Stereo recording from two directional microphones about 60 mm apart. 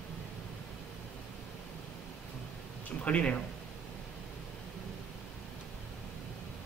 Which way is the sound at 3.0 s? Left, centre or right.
Left.